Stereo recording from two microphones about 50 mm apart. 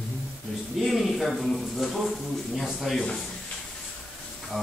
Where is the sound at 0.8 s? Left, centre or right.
Centre.